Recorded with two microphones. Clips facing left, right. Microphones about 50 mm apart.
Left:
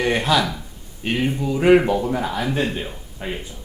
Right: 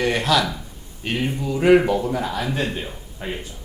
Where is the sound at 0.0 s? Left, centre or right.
Centre.